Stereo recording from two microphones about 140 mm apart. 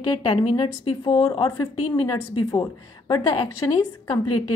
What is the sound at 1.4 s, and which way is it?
A woman's voice, 25° left (ahead or behind).